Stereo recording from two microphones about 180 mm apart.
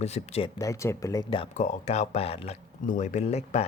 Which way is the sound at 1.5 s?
40° left (ahead or behind).